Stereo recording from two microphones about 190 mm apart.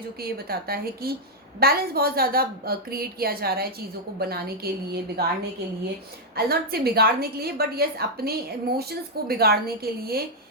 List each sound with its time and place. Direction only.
0.2 s a woman's voice: 55° right (ahead or behind)
6.3 s a woman's voice: 55° right (ahead or behind)